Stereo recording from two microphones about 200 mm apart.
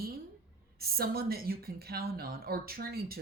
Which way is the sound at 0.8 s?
50° right (ahead or behind).